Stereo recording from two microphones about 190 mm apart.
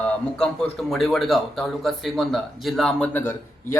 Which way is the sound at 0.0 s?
5° left (ahead or behind).